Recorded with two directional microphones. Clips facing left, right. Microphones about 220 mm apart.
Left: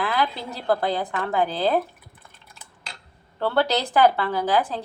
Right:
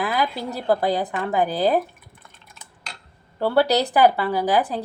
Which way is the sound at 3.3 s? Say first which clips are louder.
Right 4 dB; 15° right (ahead or behind).